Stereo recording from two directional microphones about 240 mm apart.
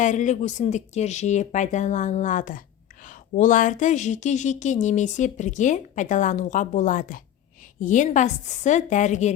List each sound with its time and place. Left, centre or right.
0.0 s a woman's voice: left